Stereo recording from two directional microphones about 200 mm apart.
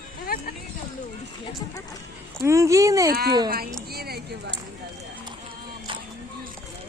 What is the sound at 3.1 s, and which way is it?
Speech, 50° right (ahead or behind).